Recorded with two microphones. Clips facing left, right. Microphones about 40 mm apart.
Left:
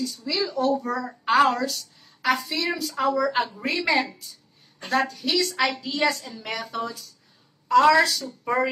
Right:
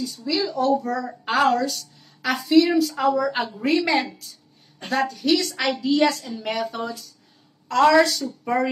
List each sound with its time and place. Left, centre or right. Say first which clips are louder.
0.0 s a woman's voice: right 2 dB; centre